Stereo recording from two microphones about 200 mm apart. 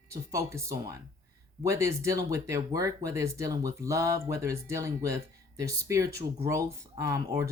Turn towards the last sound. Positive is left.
turn(degrees=-15)  # may be behind; listen again after turning